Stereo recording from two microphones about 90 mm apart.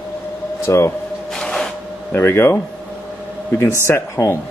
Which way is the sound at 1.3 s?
5° left (ahead or behind).